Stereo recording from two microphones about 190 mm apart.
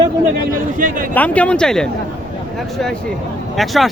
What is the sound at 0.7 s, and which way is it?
Speech, 45° right (ahead or behind).